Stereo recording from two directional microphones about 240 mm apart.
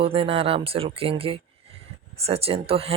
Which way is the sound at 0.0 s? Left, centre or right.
Right.